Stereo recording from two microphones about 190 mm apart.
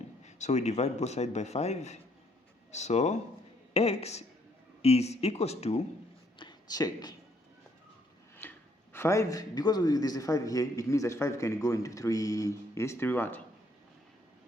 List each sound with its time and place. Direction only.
0.3 s a man's voice: 40° left (ahead or behind)
6.4 s a man's voice: 20° left (ahead or behind)
8.4 s a man's voice: 10° left (ahead or behind)